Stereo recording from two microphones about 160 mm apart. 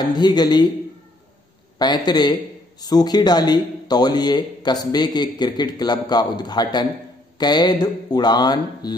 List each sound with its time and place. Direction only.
0.0 s speech: 25° left (ahead or behind)
1.8 s speech: 25° left (ahead or behind)